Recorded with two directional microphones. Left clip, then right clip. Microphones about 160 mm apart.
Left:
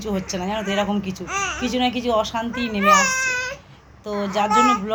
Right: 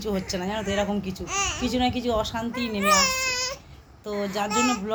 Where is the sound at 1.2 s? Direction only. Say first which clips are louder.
Left 2 dB; 20° left (ahead or behind).